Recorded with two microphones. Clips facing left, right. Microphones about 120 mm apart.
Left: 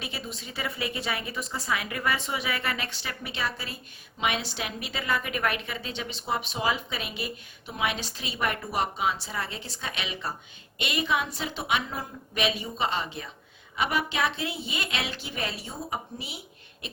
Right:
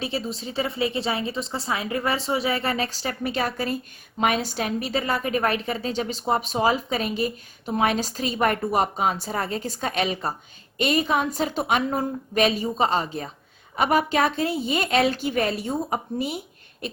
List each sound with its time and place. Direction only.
0.0 s a woman's voice: 30° right (ahead or behind); by 16.4 s 50° right (ahead or behind)